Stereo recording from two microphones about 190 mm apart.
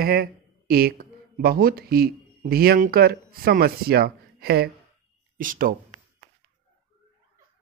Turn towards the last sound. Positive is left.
turn(degrees=-45)  # may be behind; listen again after turning